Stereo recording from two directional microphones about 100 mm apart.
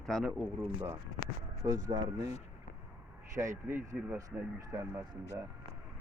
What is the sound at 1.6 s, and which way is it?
Speech, 40° right (ahead or behind).